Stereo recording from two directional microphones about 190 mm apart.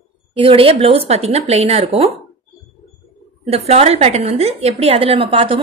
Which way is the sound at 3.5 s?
35° right (ahead or behind).